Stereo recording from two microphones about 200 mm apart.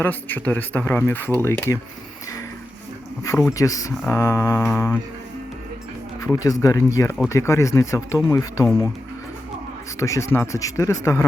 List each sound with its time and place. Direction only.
0.0 s speech: 10° left (ahead or behind)
3.5 s speech: 15° left (ahead or behind)
4.7 s music: 5° left (ahead or behind)
6.2 s speech: 15° left (ahead or behind)
10.0 s speech: 15° left (ahead or behind)